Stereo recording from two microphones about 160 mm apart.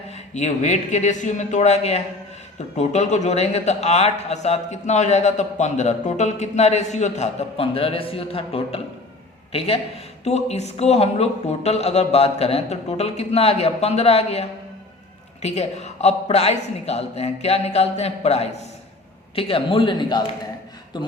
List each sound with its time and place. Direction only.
0.3 s a man's voice: 45° left (ahead or behind); by 20.2 s 25° left (ahead or behind)